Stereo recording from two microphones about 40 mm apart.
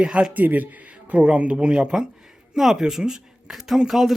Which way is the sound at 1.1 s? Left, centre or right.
Right.